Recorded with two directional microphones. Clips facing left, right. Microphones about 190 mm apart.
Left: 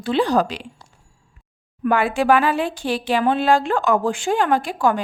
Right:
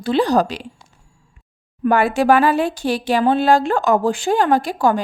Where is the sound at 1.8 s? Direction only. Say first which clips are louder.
Right 3 dB; 40° right (ahead or behind).